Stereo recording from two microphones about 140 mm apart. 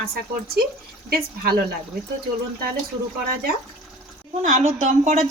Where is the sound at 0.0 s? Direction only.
90° right.